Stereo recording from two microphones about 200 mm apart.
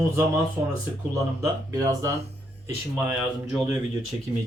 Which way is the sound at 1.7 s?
15° right (ahead or behind).